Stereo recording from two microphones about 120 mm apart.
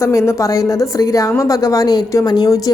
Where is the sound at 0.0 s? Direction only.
25° left (ahead or behind).